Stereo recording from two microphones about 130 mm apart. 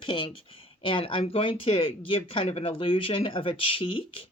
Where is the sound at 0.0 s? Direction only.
40° left (ahead or behind).